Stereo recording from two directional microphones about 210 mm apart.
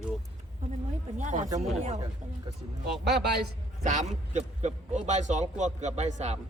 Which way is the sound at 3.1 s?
50° right (ahead or behind).